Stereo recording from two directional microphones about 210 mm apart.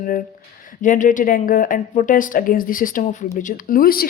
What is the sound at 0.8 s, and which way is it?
A woman's voice, 35° left (ahead or behind).